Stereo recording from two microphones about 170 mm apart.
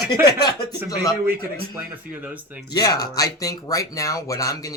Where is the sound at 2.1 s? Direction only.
10° right (ahead or behind).